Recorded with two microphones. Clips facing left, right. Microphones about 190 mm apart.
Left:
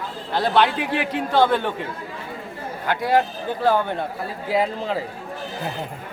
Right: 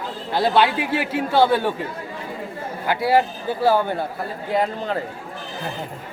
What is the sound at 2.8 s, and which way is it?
A man's voice, 5° right (ahead or behind).